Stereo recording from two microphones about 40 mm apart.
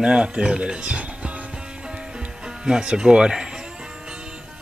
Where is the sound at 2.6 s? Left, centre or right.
Centre.